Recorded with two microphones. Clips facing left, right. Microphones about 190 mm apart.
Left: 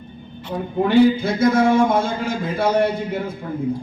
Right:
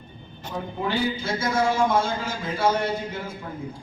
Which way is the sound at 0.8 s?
55° left (ahead or behind).